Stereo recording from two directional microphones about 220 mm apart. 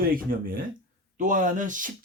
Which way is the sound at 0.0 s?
40° right (ahead or behind).